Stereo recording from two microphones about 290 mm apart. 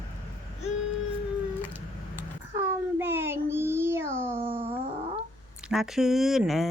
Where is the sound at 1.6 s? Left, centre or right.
Centre.